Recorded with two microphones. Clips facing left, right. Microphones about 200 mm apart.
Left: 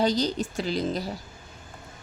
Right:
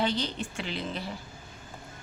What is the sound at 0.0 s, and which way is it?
A woman's voice, 40° left (ahead or behind).